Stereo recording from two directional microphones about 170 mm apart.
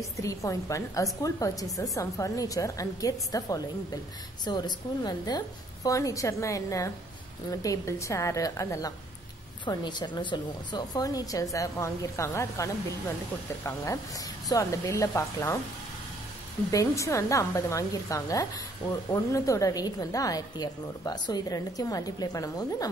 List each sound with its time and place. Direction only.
0.2 s a woman's voice: 20° left (ahead or behind)
14.5 s a woman's voice: 15° left (ahead or behind)
16.7 s a woman's voice: 20° left (ahead or behind)